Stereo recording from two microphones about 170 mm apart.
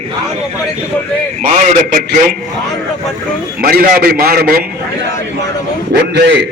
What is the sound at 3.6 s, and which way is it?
A man's voice, 60° right (ahead or behind).